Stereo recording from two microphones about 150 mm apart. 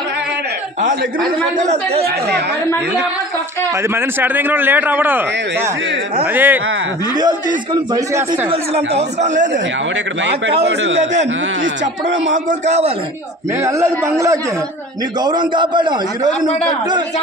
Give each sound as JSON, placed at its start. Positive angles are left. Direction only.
{"t": 1.6, "sound": "speech", "side_deg": -45}
{"t": 2.0, "sound": "speech", "side_deg": -90}
{"t": 3.9, "sound": "a man's voice", "side_deg": -15}
{"t": 7.2, "sound": "a man's voice", "side_deg": -30}
{"t": 8.5, "sound": "speech", "side_deg": -45}
{"t": 12.4, "sound": "speech", "side_deg": -50}
{"t": 13.6, "sound": "a man's voice", "side_deg": -20}